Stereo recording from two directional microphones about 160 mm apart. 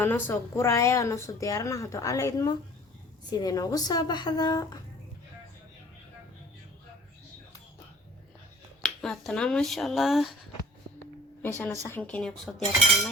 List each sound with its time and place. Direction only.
0.0 s speech: 15° left (ahead or behind)
8.8 s speech: centre (ahead or behind)
11.5 s a woman's voice: 15° left (ahead or behind)